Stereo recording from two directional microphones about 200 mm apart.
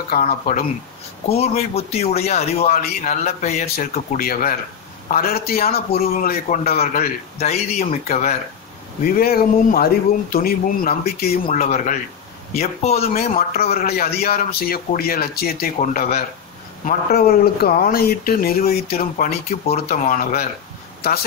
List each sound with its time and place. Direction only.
0.1 s a man's voice: 45° left (ahead or behind)
1.3 s speech: 30° left (ahead or behind)
3.7 s a man's voice: 45° left (ahead or behind)
9.0 s a man's voice: 50° left (ahead or behind); by 13.1 s 30° left (ahead or behind)
13.4 s a man's voice: 50° left (ahead or behind)